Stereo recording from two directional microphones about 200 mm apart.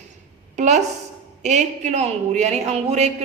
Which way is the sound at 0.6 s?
35° right (ahead or behind).